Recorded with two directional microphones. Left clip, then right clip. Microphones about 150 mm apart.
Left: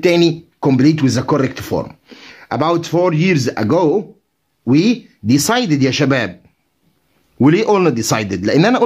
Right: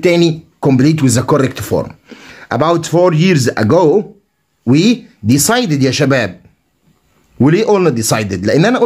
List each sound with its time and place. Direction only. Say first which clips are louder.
0.0 s speech: right 1 dB; 20° left (ahead or behind)
7.3 s speech: right 2 dB; 25° left (ahead or behind)